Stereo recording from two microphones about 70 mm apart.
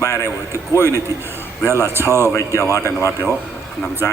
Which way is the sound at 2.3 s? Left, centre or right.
Left.